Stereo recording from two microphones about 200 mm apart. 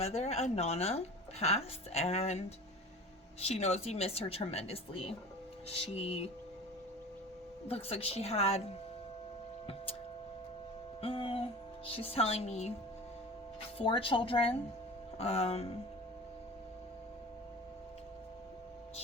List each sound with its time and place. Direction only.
0.0 s a woman's voice: 35° left (ahead or behind)
3.4 s a woman's voice: 30° left (ahead or behind)
7.7 s a woman's voice: 30° left (ahead or behind)
11.0 s music: 25° left (ahead or behind)
11.9 s a woman's voice: 30° left (ahead or behind)
13.7 s a woman's voice: 25° left (ahead or behind)